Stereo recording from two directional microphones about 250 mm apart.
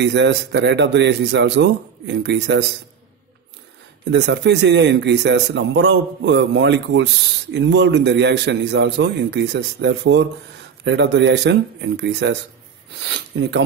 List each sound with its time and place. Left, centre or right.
0.0 s speech: right
4.1 s speech: right